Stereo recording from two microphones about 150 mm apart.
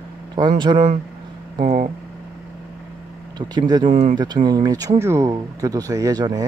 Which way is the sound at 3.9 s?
50° right (ahead or behind).